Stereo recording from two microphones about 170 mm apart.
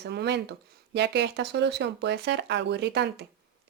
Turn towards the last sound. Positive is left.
turn(degrees=-85)